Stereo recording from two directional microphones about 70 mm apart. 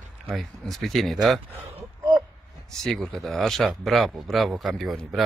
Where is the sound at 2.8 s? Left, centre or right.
Centre.